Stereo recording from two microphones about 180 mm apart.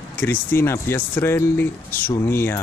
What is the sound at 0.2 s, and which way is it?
Speech, 10° left (ahead or behind).